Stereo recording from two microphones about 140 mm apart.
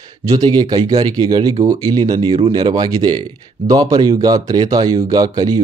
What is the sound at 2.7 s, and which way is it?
A man's voice, 30° right (ahead or behind).